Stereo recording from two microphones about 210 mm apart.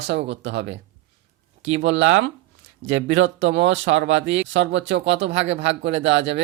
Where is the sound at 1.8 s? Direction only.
65° right (ahead or behind).